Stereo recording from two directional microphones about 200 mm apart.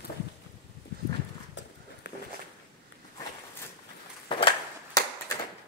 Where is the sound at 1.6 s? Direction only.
60° left (ahead or behind).